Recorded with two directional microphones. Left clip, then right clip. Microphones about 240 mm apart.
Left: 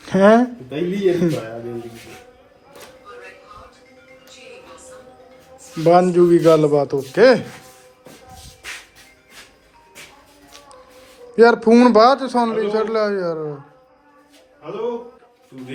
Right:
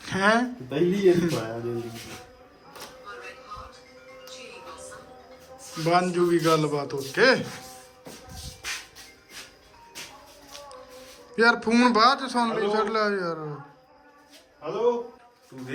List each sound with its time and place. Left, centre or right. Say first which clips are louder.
0.0 s a man's voice: left 9 dB; centre
5.8 s a man's voice: left 10 dB; centre
11.3 s a man's voice: left 9 dB; centre